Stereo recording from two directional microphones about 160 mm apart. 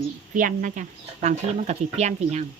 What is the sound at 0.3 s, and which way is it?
Speech, 55° right (ahead or behind).